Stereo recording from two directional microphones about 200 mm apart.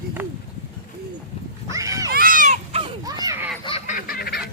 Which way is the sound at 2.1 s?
45° right (ahead or behind).